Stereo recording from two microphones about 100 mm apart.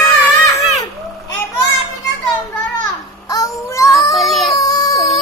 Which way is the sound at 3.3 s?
30° left (ahead or behind).